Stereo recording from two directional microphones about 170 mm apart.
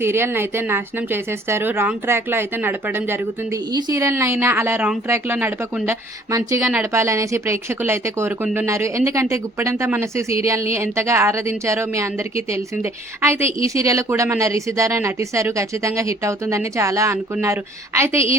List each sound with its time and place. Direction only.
0.0 s speech: 15° right (ahead or behind)